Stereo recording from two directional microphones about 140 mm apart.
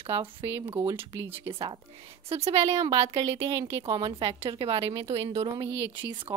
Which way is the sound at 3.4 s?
40° right (ahead or behind).